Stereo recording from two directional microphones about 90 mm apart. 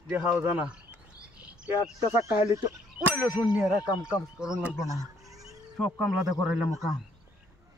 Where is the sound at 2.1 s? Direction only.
35° right (ahead or behind).